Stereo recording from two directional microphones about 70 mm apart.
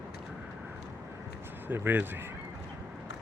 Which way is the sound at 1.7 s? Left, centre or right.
Right.